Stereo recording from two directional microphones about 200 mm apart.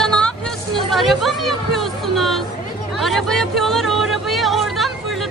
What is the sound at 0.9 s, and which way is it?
Speech, centre (ahead or behind).